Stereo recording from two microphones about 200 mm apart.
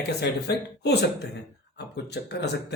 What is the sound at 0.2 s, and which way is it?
Speech, 55° left (ahead or behind).